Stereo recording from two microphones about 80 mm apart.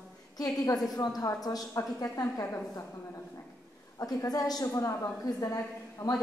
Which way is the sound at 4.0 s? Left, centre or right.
Left.